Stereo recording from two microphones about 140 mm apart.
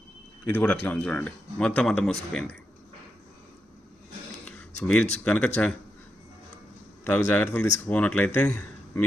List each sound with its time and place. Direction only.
0.4 s speech: 10° left (ahead or behind)
4.8 s speech: 10° left (ahead or behind)
7.0 s speech: 15° left (ahead or behind)